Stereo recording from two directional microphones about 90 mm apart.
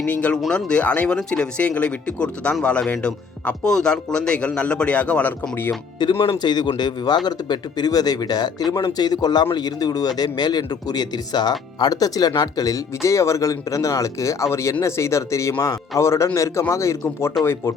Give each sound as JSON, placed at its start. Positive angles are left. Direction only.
{"t": 0.0, "sound": "speech", "side_deg": 15}
{"t": 6.0, "sound": "speech", "side_deg": 55}